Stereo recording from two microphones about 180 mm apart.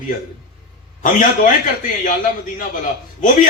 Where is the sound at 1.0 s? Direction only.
45° left (ahead or behind).